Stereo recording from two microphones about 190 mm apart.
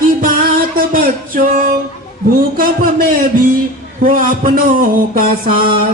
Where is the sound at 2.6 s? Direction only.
50° right (ahead or behind).